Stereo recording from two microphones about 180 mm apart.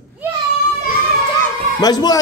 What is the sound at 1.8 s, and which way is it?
Speech, 20° left (ahead or behind).